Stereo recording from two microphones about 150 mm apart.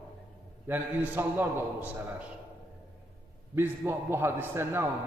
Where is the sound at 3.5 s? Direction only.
15° right (ahead or behind).